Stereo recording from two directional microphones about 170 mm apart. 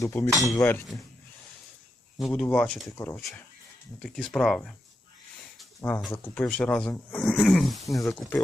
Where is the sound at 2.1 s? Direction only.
Centre (ahead or behind).